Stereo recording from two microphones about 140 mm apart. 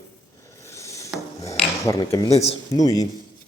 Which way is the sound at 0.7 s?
20° left (ahead or behind).